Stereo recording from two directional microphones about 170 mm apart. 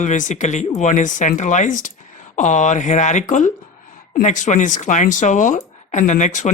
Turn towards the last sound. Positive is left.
turn(degrees=45)  # may be behind; listen again after turning